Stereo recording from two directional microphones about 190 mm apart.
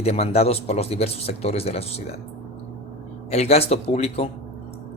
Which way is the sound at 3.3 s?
35° left (ahead or behind).